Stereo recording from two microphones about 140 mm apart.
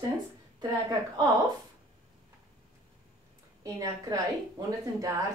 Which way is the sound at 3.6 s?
25° right (ahead or behind).